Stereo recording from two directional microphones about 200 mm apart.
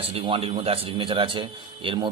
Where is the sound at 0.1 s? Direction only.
30° right (ahead or behind).